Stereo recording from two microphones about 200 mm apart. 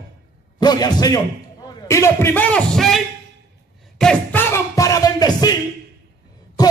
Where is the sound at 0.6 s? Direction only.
20° left (ahead or behind); by 3.0 s centre (ahead or behind).